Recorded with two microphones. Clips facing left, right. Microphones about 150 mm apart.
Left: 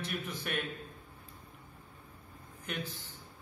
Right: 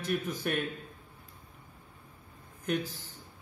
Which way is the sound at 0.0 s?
45° right (ahead or behind).